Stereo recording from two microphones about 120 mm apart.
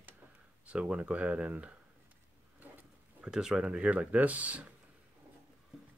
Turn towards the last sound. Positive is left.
turn(degrees=-10)  # may be behind; listen again after turning